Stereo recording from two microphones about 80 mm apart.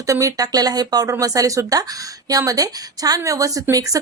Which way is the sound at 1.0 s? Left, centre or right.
Right.